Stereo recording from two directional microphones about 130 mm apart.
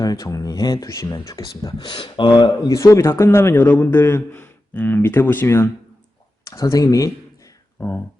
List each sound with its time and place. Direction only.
0.0 s a man's voice: 30° left (ahead or behind)
7.8 s speech: 15° left (ahead or behind)